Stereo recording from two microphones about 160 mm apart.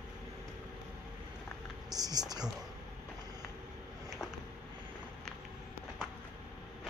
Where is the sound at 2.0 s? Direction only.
25° right (ahead or behind).